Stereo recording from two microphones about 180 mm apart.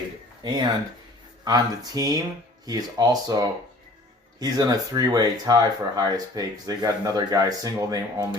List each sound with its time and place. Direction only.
0.4 s speech: 25° right (ahead or behind)